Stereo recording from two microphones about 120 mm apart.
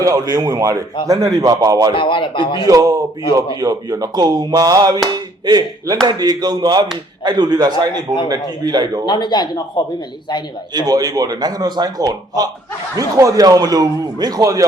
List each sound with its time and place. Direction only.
0.0 s speech: 30° right (ahead or behind)
1.9 s a man's voice: 45° left (ahead or behind)
2.6 s speech: 30° right (ahead or behind)
9.0 s speech: 35° left (ahead or behind)
10.8 s speech: 30° right (ahead or behind)